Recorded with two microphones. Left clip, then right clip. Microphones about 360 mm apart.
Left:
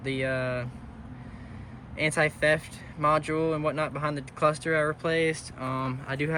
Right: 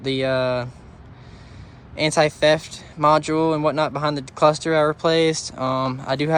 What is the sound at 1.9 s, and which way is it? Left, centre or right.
Speech, centre.